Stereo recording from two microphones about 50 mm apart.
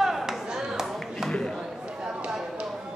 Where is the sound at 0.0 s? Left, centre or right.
Centre.